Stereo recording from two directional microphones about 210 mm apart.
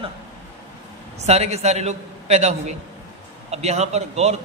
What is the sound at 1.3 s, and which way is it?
A man's voice, 30° right (ahead or behind).